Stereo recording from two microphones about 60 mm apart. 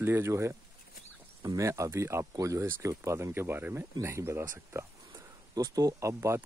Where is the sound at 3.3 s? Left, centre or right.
Right.